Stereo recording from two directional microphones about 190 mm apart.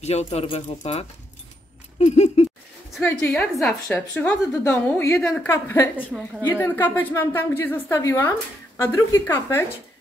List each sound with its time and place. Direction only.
0.0 s speech: 35° left (ahead or behind)
3.0 s a woman's voice: 5° left (ahead or behind)